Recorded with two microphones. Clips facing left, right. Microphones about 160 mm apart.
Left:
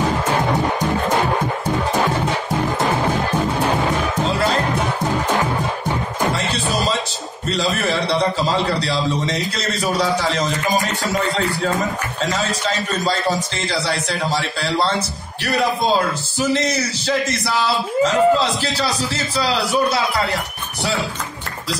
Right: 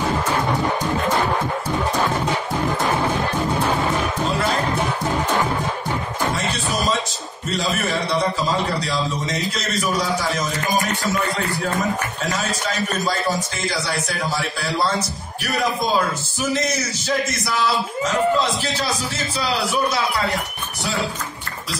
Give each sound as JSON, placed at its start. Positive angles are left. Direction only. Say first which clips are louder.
{"t": 14.3, "sound": "a man's voice", "louder": "left 3 dB", "side_deg": 30}
{"t": 18.0, "sound": "a man's voice", "louder": "left 4 dB", "side_deg": 35}